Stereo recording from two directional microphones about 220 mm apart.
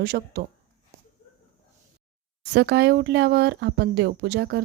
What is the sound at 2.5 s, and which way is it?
A woman's voice, 50° right (ahead or behind).